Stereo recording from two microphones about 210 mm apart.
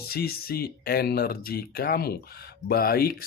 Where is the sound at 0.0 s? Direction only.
45° left (ahead or behind).